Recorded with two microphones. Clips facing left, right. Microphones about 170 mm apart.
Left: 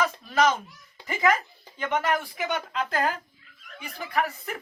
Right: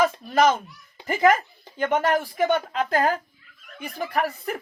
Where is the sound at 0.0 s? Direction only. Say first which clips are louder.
Right 4 dB; 45° right (ahead or behind).